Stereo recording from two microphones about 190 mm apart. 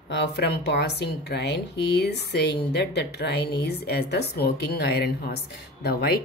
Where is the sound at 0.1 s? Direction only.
60° left (ahead or behind).